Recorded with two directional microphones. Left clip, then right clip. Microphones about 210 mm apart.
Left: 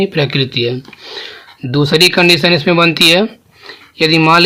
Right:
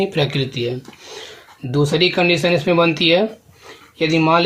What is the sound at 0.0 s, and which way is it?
Speech, 40° left (ahead or behind).